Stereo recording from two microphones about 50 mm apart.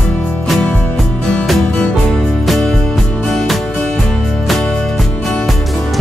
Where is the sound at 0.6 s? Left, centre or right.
Left.